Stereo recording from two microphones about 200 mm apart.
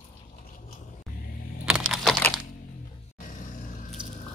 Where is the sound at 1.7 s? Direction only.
Centre (ahead or behind).